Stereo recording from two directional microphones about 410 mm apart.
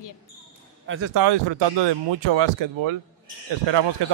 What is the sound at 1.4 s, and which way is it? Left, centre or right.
Speech, right.